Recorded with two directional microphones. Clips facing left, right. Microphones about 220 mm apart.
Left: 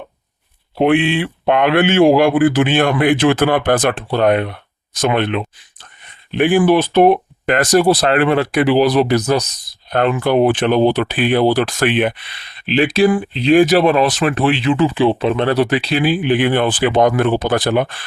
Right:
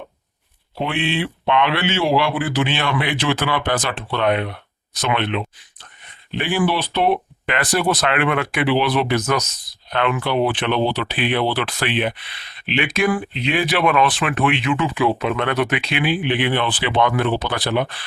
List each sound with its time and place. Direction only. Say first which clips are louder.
0.8 s speech: left 8 dB; 55° left (ahead or behind)
12.5 s speech: left 7 dB; 35° left (ahead or behind)